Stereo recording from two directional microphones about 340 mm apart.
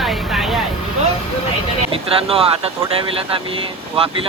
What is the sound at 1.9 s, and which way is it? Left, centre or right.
Speech, centre.